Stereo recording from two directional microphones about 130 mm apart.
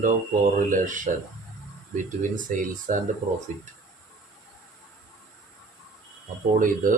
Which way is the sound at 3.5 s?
65° right (ahead or behind).